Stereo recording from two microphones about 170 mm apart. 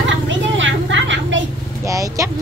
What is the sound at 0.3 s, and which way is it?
Vehicle, 90° right.